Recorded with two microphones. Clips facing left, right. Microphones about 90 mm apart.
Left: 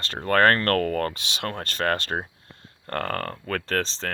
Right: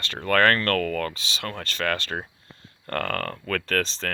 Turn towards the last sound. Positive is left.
turn(degrees=30)  # may be behind; listen again after turning